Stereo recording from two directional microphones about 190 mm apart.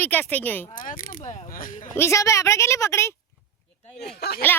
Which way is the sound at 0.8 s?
45° left (ahead or behind).